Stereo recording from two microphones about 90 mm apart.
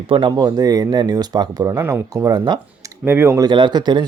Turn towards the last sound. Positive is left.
turn(degrees=-55)  # may be behind; listen again after turning